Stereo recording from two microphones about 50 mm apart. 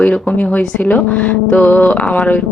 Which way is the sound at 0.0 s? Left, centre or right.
Left.